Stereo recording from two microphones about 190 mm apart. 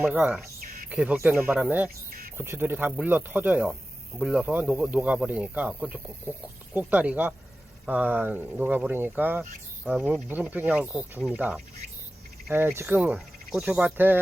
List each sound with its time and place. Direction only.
0.0 s speech: 10° right (ahead or behind)
2.0 s a sound: 50° right (ahead or behind)
2.4 s speech: 10° right (ahead or behind)